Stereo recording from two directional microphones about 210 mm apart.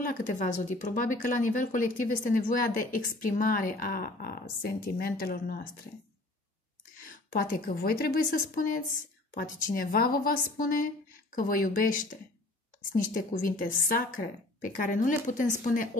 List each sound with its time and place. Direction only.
0.0 s speech: 40° left (ahead or behind)
7.0 s a woman's voice: 40° left (ahead or behind)